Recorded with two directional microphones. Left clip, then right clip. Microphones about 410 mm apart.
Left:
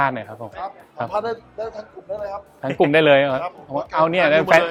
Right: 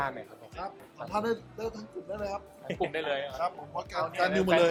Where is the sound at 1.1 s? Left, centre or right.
Right.